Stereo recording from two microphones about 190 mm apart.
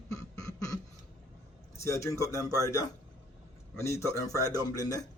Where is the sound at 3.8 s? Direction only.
15° left (ahead or behind).